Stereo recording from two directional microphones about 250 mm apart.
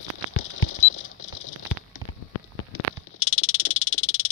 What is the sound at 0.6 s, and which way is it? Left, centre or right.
Patter, left.